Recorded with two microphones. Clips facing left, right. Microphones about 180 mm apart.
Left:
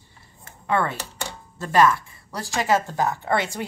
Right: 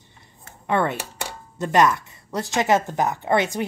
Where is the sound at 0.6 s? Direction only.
20° right (ahead or behind).